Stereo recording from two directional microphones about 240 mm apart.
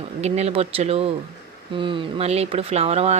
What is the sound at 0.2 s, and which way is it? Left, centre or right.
Speech, right.